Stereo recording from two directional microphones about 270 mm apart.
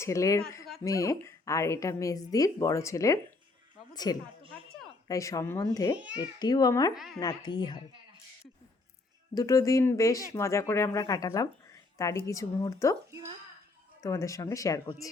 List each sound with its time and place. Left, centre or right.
0.0 s a woman's voice: centre
6.9 s a woman's voice: centre
7.2 s a woman's voice: centre
9.3 s a woman's voice: centre
13.1 s a woman's voice: centre
14.0 s a woman's voice: centre